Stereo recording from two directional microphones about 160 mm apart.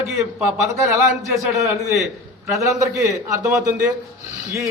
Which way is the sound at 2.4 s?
20° right (ahead or behind).